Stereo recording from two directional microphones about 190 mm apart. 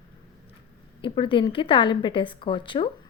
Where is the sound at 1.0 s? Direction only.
25° left (ahead or behind).